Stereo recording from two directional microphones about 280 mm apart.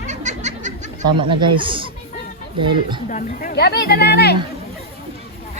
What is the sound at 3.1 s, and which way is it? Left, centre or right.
Speech, left.